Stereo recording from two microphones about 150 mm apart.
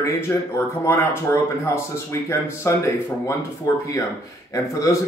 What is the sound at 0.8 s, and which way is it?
Speech, 15° left (ahead or behind).